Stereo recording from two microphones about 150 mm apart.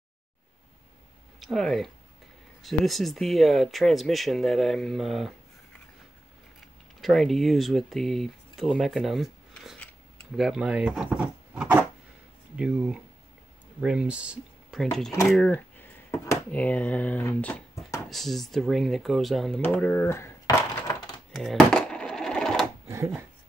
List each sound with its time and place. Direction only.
1.4 s speech: centre (ahead or behind)
7.0 s speech: centre (ahead or behind)
18.1 s speech: centre (ahead or behind)
19.6 s a sound: 10° left (ahead or behind)
21.3 s sewing machine: centre (ahead or behind)
22.8 s a sound: 20° right (ahead or behind)